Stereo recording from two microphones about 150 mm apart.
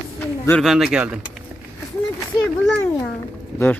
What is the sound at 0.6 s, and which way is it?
Speech, centre (ahead or behind).